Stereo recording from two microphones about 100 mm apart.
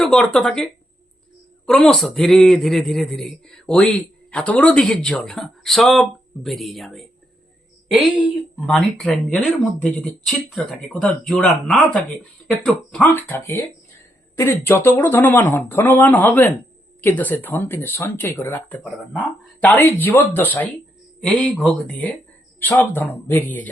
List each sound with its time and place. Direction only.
0.0 s a man's voice: 5° left (ahead or behind)
7.9 s a woman's voice: 10° right (ahead or behind)
8.6 s a man's voice: 5° left (ahead or behind)
12.6 s speech: 10° left (ahead or behind)